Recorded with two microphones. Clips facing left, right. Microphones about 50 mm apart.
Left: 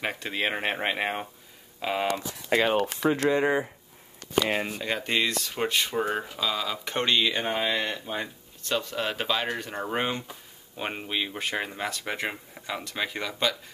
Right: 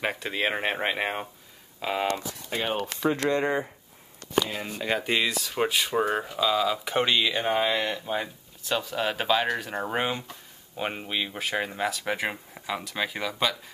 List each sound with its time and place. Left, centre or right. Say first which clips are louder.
0.0 s speech: right 1 dB; centre
2.5 s speech: left 7 dB; left
3.0 s speech: right 2 dB; centre
4.7 s speech: right 1 dB; centre